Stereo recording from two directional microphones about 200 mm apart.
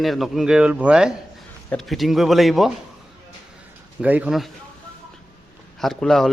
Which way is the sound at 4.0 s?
5° right (ahead or behind).